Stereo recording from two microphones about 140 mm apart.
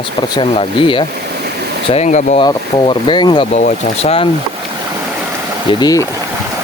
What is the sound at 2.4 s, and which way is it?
Speech, 35° left (ahead or behind).